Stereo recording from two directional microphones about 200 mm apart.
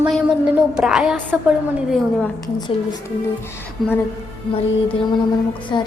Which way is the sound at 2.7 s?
30° left (ahead or behind).